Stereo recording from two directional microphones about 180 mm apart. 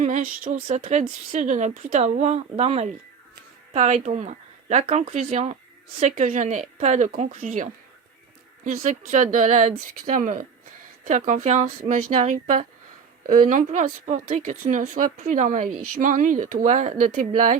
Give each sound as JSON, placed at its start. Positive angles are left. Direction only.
{"t": 0.0, "sound": "speech", "side_deg": -45}